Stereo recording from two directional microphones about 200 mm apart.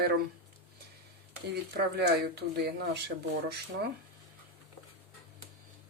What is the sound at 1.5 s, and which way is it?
Speech, 55° right (ahead or behind).